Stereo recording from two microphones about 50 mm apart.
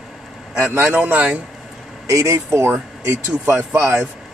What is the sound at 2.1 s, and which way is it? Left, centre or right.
Speech, right.